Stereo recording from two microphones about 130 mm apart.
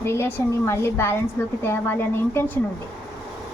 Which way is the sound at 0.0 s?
20° left (ahead or behind).